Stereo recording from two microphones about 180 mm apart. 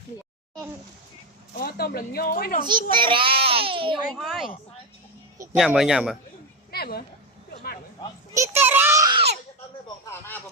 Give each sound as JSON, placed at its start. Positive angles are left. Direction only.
{"t": 1.5, "sound": "speech", "side_deg": 55}
{"t": 2.9, "sound": "a child's voice", "side_deg": -25}
{"t": 4.1, "sound": "speech", "side_deg": 0}
{"t": 5.5, "sound": "speech", "side_deg": 0}
{"t": 6.7, "sound": "a sound", "side_deg": 60}
{"t": 8.4, "sound": "a sound", "side_deg": -10}
{"t": 10.1, "sound": "speech", "side_deg": 10}